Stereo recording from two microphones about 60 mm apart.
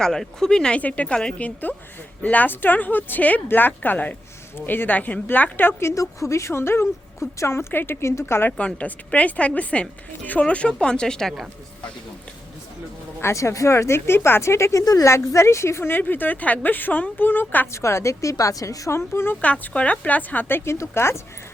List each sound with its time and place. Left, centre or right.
0.0 s speech: centre
0.8 s speech: left
1.0 s speech: centre
1.4 s speech: left
5.8 s speech: left
8.4 s speech: left
13.2 s speech: left
15.0 s speech: left
17.7 s a woman's voice: left
18.9 s speech: left
19.4 s speech: left
20.6 s speech: left